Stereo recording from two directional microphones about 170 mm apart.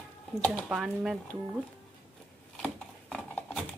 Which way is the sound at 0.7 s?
Centre (ahead or behind).